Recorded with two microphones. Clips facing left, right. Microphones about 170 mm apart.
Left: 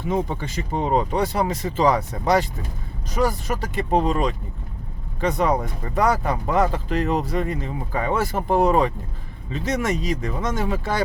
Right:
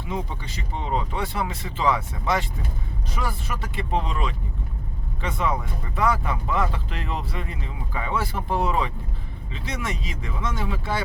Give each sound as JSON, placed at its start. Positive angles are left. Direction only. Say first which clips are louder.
{"t": 0.0, "sound": "speech", "louder": "left 7 dB", "side_deg": 45}